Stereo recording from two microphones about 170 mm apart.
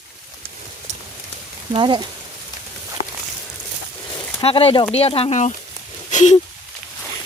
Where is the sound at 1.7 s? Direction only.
25° right (ahead or behind).